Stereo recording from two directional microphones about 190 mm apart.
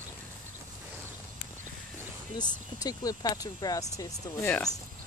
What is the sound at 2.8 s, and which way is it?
Speech, 20° left (ahead or behind).